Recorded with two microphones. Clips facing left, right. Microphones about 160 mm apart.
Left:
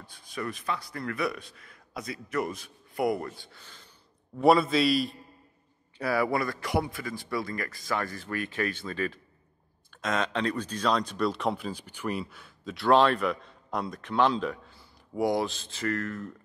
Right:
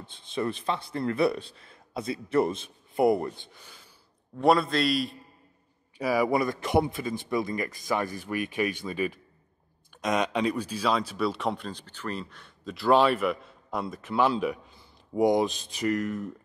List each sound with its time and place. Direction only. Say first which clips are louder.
0.0 s speech: right 5 dB; 25° right (ahead or behind)
4.4 s speech: left 1 dB; centre (ahead or behind)
5.9 s speech: right 3 dB; 15° right (ahead or behind)
15.1 s speech: right 4 dB; 20° right (ahead or behind)